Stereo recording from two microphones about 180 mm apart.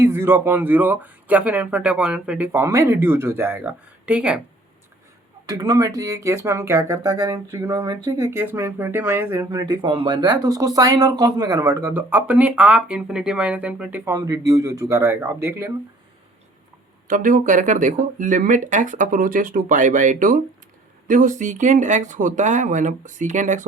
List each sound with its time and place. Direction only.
0.0 s speech: 15° right (ahead or behind)
5.5 s speech: 20° right (ahead or behind)
17.1 s speech: 45° right (ahead or behind)